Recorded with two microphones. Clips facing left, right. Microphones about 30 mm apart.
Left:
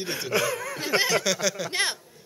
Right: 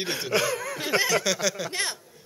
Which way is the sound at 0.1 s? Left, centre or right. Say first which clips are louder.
Even; centre.